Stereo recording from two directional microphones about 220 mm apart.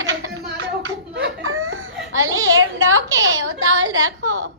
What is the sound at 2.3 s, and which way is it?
A woman's voice, 65° right (ahead or behind).